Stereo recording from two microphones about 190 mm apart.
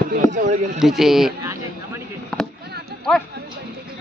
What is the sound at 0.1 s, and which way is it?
Speech, 40° right (ahead or behind).